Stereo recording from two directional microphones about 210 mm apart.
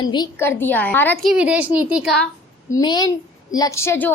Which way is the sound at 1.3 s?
5° right (ahead or behind).